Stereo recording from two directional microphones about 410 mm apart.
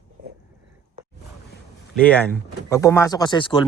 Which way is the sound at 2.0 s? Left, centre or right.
Centre.